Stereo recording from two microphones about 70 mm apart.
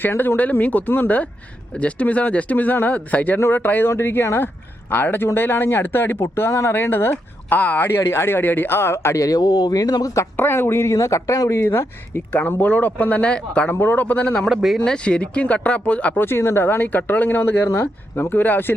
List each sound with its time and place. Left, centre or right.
0.0 s speech: left
3.3 s speech: left
7.9 s speech: left
9.1 s speech: left
9.4 s speech: left
10.3 s speech: left
14.5 s speech: centre
14.8 s speech: centre
16.2 s speech: left